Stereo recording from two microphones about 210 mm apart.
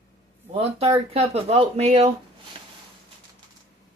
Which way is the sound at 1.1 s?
30° right (ahead or behind).